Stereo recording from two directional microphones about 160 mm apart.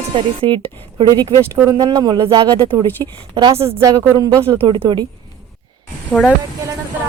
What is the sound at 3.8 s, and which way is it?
Speech, 20° right (ahead or behind).